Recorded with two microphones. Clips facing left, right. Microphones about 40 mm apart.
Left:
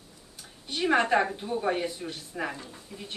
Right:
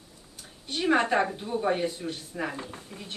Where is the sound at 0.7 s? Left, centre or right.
Centre.